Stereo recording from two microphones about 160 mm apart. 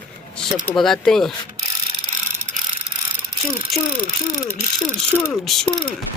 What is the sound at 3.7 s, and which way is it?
Speech, centre (ahead or behind).